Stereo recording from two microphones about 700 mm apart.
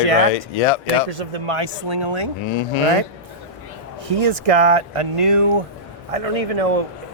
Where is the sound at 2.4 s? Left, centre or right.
Left.